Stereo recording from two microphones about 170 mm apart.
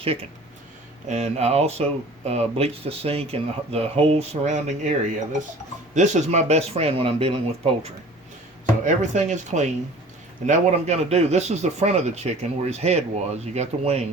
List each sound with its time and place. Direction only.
0.0 s a man's voice: 35° right (ahead or behind)